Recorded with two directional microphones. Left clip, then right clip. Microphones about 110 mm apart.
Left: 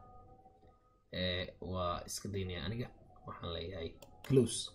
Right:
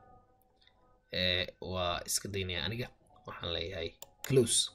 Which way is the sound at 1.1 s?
20° right (ahead or behind).